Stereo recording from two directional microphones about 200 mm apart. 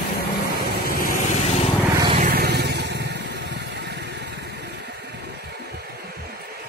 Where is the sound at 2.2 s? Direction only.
50° right (ahead or behind).